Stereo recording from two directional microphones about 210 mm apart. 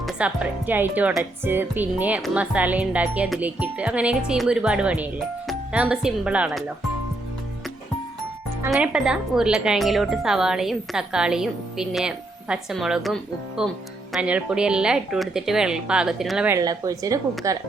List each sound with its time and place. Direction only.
0.0 s speech: 5° right (ahead or behind)
8.6 s speech: 5° right (ahead or behind)
16.5 s speech: 15° right (ahead or behind)